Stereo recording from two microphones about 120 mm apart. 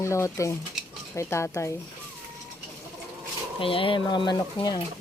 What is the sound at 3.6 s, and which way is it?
Speech, 50° left (ahead or behind).